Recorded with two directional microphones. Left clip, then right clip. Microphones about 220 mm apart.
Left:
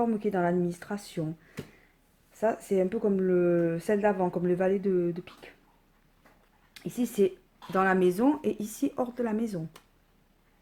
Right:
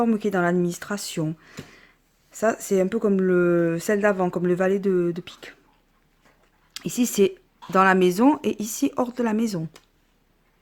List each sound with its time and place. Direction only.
0.0 s speech: 30° right (ahead or behind)
6.7 s speech: 35° right (ahead or behind)